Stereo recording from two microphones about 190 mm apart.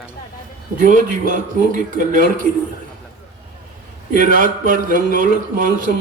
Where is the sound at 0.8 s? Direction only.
45° right (ahead or behind).